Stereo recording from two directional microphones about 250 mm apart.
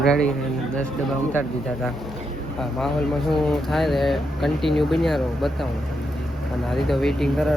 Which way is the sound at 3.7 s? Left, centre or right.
Centre.